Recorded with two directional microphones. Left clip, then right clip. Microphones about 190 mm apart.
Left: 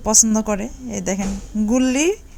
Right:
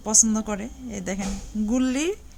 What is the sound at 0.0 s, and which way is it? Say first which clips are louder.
A woman's voice: left 5 dB; 20° left (ahead or behind).